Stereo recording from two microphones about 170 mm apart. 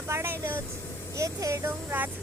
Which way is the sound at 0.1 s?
15° right (ahead or behind).